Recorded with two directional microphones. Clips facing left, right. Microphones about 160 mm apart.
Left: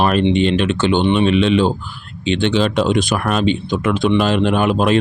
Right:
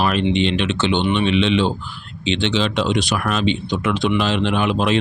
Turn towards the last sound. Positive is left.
turn(degrees=45)  # may be behind; listen again after turning